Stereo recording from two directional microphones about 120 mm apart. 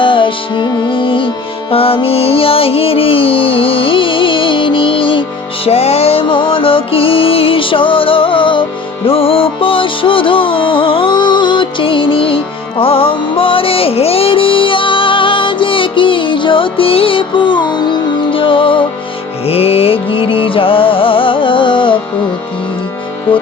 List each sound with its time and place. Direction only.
0.0 s music: 45° left (ahead or behind)
5.6 s music: 60° left (ahead or behind)